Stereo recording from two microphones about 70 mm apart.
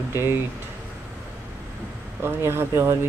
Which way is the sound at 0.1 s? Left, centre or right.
Right.